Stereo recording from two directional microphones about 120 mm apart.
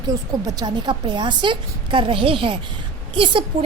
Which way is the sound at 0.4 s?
35° right (ahead or behind).